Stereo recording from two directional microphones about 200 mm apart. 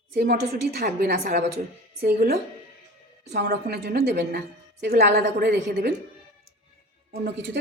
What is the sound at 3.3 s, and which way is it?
A woman's voice, 55° right (ahead or behind).